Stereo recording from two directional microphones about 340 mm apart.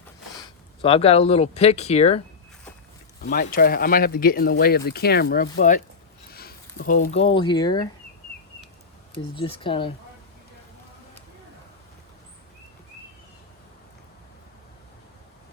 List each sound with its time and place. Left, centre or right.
0.8 s speech: centre
3.2 s speech: left
9.1 s speech: centre